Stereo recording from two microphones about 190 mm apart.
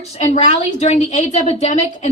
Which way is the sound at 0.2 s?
35° left (ahead or behind).